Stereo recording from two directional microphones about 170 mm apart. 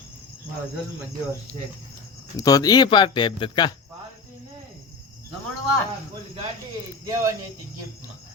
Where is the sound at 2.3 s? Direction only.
20° left (ahead or behind).